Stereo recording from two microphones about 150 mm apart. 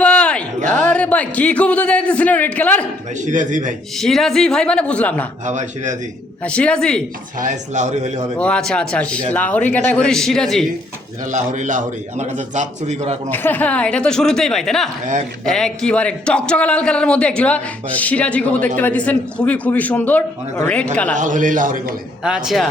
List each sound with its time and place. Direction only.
0.0 s a sound: 10° left (ahead or behind)
3.2 s a man's voice: 55° right (ahead or behind)
3.9 s speech: centre (ahead or behind)
5.5 s a man's voice: 55° right (ahead or behind)
6.4 s a man's voice: 5° left (ahead or behind)
7.3 s a man's voice: 55° right (ahead or behind)
8.4 s a man's voice: 5° left (ahead or behind)
11.3 s a man's voice: 55° right (ahead or behind)
13.3 s a man's voice: 10° left (ahead or behind)
21.2 s a man's voice: 60° right (ahead or behind)
22.2 s speech: 5° right (ahead or behind)